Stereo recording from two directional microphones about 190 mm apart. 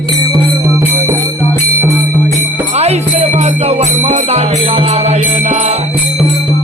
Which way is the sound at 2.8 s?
35° right (ahead or behind).